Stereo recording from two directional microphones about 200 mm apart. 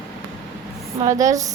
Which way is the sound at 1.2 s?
15° right (ahead or behind).